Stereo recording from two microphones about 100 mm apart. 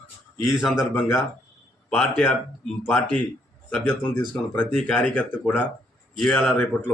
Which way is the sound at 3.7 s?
15° left (ahead or behind).